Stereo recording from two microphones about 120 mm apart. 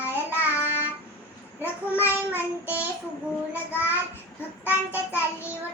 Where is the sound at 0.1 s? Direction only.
20° left (ahead or behind).